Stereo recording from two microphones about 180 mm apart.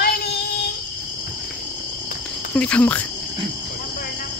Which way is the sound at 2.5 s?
5° left (ahead or behind).